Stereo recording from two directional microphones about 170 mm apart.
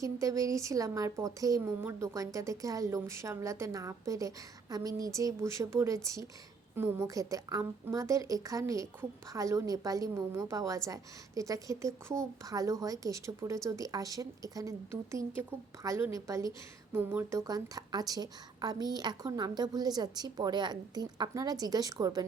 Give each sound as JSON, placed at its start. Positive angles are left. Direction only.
{"t": 0.0, "sound": "a woman's voice", "side_deg": -20}